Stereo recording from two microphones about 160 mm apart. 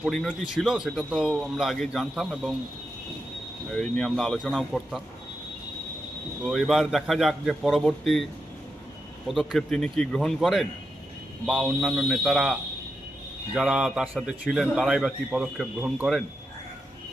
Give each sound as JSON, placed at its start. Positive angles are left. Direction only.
{"t": 0.0, "sound": "a man's voice", "side_deg": 0}
{"t": 3.7, "sound": "a man's voice", "side_deg": 5}
{"t": 6.4, "sound": "a man's voice", "side_deg": 0}
{"t": 9.3, "sound": "a man's voice", "side_deg": 0}
{"t": 13.6, "sound": "a man's voice", "side_deg": -5}